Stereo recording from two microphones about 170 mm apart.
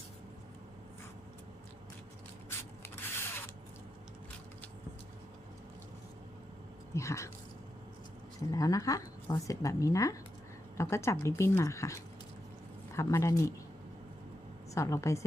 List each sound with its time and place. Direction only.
2.5 s zipper: 15° left (ahead or behind)
6.9 s speech: 15° left (ahead or behind)
8.4 s speech: 20° left (ahead or behind)
14.8 s speech: 15° left (ahead or behind)